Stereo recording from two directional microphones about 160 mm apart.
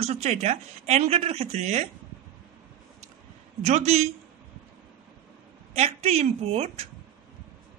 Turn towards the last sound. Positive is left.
turn(degrees=-40)  # may be behind; listen again after turning